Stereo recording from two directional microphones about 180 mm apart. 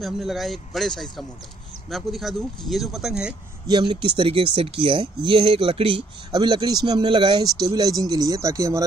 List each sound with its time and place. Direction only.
0.0 s speech: centre (ahead or behind)
3.6 s speech: 25° right (ahead or behind)